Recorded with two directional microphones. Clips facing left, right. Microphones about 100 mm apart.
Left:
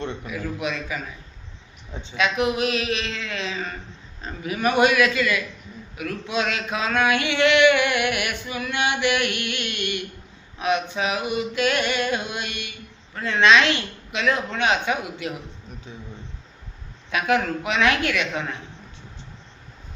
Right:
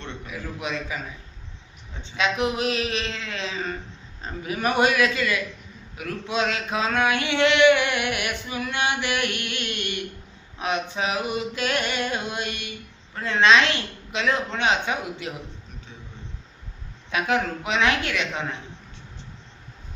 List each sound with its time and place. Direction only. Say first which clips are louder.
0.3 s a man's voice: left 1 dB; 30° right (ahead or behind)
2.1 s a sound: left 2 dB; 30° right (ahead or behind)
14.1 s a man's voice: left 1 dB; 30° right (ahead or behind)
17.1 s a man's voice: left 2 dB; 25° right (ahead or behind)